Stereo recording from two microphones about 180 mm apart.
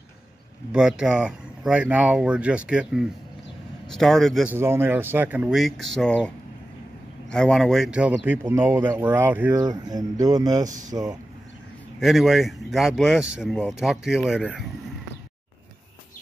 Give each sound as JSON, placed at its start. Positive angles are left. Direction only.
{"t": 0.7, "sound": "speech", "side_deg": -5}
{"t": 4.5, "sound": "speech", "side_deg": -15}
{"t": 9.7, "sound": "speech", "side_deg": -20}
{"t": 12.0, "sound": "speech", "side_deg": 0}